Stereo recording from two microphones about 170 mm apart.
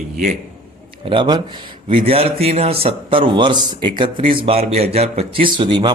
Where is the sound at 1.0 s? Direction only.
30° right (ahead or behind).